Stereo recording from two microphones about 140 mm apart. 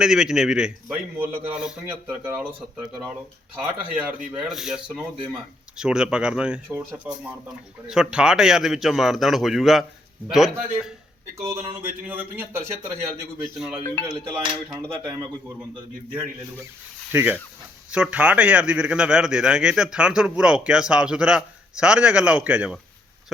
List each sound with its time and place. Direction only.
0.0 s a man's voice: 5° right (ahead or behind)
11.4 s a man's voice: 15° right (ahead or behind)
14.1 s a man's voice: 25° right (ahead or behind)
17.1 s a man's voice: 15° right (ahead or behind)